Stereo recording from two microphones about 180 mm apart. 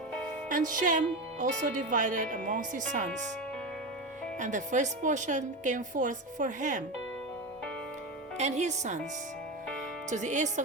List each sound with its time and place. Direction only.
0.5 s speech: 45° right (ahead or behind)
4.4 s speech: 45° right (ahead or behind)
8.4 s speech: 40° right (ahead or behind)
10.1 s speech: 45° right (ahead or behind)